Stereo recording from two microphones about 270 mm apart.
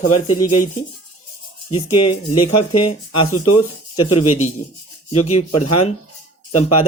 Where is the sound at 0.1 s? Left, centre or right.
Left.